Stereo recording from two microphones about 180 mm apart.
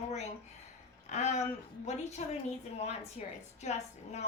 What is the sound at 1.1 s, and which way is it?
A woman's voice, 40° left (ahead or behind).